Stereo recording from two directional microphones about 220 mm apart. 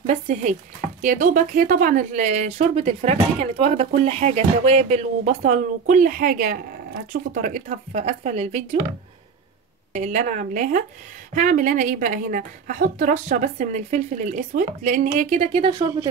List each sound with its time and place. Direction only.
0.0 s speech: 30° right (ahead or behind)
9.9 s speech: 35° right (ahead or behind)